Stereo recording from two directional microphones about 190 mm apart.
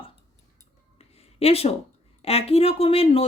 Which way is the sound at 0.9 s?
30° left (ahead or behind).